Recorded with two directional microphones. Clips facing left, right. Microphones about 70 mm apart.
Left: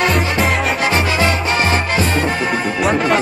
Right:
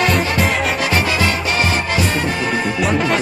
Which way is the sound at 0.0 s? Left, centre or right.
Centre.